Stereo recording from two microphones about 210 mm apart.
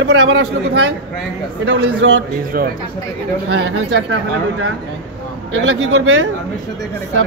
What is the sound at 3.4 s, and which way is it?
Speech, 60° right (ahead or behind).